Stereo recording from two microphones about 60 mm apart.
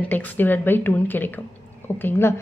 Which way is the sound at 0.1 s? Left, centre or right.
Left.